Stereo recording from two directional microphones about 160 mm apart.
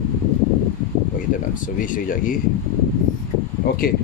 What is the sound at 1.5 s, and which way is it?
Speech, 55° left (ahead or behind).